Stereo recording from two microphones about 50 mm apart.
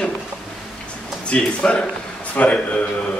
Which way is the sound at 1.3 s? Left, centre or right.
Left.